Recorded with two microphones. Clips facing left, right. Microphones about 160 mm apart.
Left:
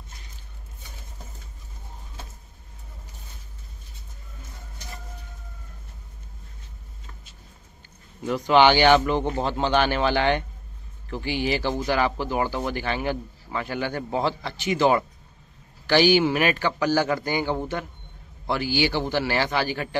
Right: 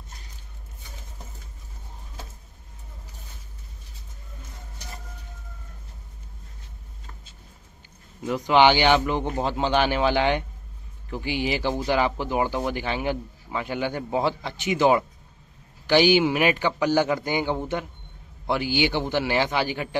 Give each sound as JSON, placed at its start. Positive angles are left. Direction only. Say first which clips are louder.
{"t": 8.3, "sound": "speech", "louder": "left 1 dB", "side_deg": -15}